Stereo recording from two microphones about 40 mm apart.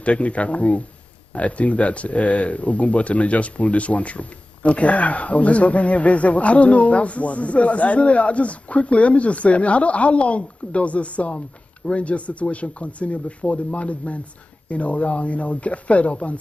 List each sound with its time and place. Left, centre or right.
0.0 s speech: left